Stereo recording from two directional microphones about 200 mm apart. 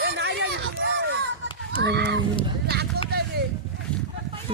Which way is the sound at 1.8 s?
60° right (ahead or behind).